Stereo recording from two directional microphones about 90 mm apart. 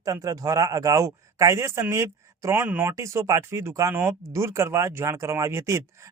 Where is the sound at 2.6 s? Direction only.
20° right (ahead or behind).